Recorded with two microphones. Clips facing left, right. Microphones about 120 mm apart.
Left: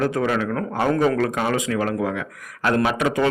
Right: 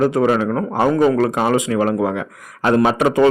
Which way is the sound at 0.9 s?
10° right (ahead or behind).